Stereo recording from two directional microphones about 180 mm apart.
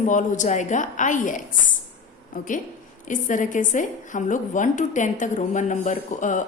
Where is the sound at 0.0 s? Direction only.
45° left (ahead or behind).